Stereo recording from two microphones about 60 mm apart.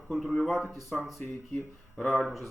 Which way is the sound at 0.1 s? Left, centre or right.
Centre.